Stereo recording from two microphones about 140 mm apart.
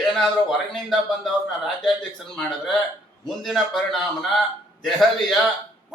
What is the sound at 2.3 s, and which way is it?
A man's voice, 5° left (ahead or behind).